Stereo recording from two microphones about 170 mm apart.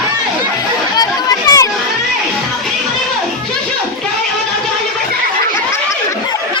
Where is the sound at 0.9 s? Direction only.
20° left (ahead or behind).